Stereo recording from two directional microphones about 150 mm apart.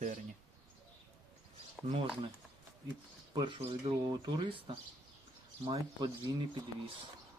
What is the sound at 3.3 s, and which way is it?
Speech, 30° right (ahead or behind).